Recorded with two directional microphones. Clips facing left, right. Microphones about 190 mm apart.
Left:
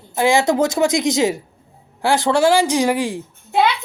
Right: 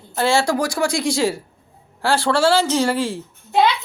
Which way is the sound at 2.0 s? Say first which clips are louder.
Left 2 dB; 15° left (ahead or behind).